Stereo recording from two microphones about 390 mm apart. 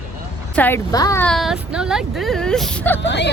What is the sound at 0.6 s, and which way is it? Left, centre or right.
A woman's voice, centre.